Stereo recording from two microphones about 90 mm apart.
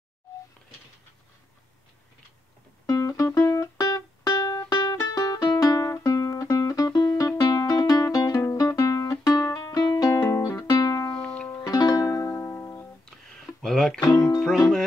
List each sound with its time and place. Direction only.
2.9 s music: 40° left (ahead or behind)
11.1 s music: 10° left (ahead or behind)
11.6 s music: 45° left (ahead or behind)
13.6 s music: 5° left (ahead or behind)